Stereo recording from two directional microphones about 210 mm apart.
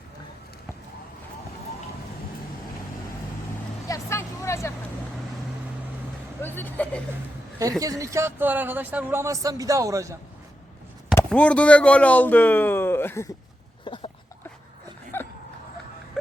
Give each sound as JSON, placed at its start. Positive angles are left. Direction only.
{"t": 3.8, "sound": "vehicle", "side_deg": 15}
{"t": 6.4, "sound": "speech", "side_deg": 10}
{"t": 7.6, "sound": "speech", "side_deg": -15}
{"t": 11.1, "sound": "speech", "side_deg": 10}
{"t": 13.8, "sound": "a sound", "side_deg": 25}
{"t": 15.1, "sound": "a sound", "side_deg": 10}